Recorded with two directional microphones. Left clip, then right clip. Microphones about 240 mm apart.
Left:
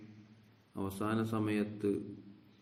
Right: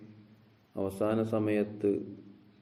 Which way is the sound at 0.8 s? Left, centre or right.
Left.